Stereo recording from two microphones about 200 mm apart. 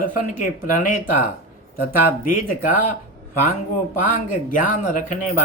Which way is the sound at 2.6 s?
40° left (ahead or behind).